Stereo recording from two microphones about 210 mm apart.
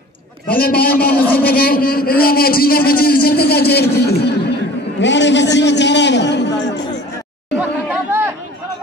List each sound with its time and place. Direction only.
0.6 s a man's voice: 45° left (ahead or behind)
1.2 s speech: 10° left (ahead or behind)
1.5 s a man's voice: 45° left (ahead or behind)
7.5 s chatter: 10° right (ahead or behind)